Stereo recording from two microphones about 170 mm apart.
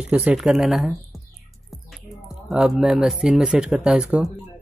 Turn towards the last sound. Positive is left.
turn(degrees=-5)  # may be behind; listen again after turning